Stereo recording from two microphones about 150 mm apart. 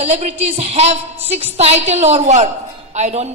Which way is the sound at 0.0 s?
45° right (ahead or behind).